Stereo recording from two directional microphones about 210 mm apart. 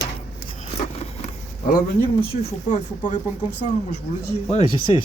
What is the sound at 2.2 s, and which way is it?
Speech, 25° left (ahead or behind).